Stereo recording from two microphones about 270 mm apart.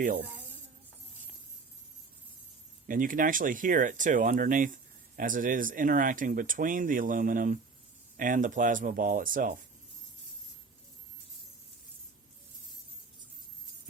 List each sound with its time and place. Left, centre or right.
0.0 s speech: right
2.8 s speech: right